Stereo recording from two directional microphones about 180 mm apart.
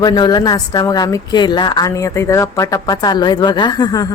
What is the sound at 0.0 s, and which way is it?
A woman's voice, 25° left (ahead or behind).